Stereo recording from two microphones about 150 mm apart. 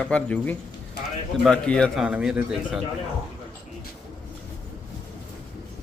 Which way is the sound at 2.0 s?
5° right (ahead or behind).